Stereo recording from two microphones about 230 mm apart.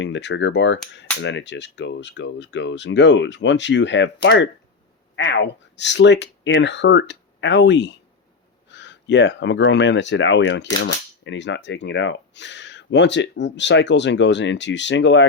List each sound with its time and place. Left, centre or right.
0.0 s speech: left